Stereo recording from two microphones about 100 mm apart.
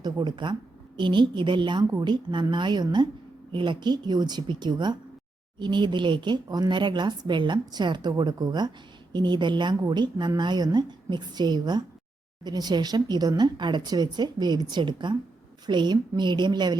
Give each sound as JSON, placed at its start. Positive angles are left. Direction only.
{"t": 0.0, "sound": "speech", "side_deg": -50}